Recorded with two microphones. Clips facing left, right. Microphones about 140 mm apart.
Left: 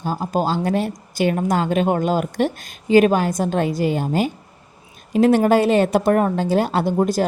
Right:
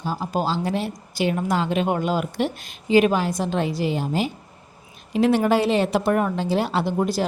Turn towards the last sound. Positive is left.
turn(degrees=45)  # may be behind; listen again after turning